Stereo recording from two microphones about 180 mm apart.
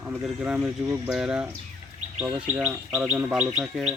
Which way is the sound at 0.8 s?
15° right (ahead or behind).